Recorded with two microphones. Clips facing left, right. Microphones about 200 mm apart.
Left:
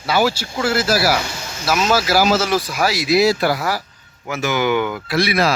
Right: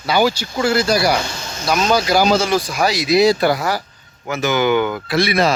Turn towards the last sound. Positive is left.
turn(degrees=0)  # may be behind; listen again after turning